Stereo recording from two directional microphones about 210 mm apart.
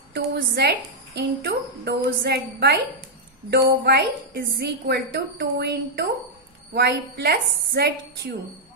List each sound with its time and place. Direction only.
0.1 s a woman's voice: 50° right (ahead or behind)